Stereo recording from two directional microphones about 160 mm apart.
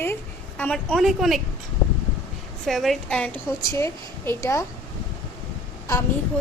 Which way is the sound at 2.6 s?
Centre (ahead or behind).